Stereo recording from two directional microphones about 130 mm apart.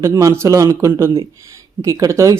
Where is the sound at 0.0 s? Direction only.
25° right (ahead or behind).